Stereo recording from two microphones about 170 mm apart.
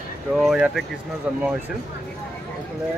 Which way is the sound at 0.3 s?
Centre (ahead or behind).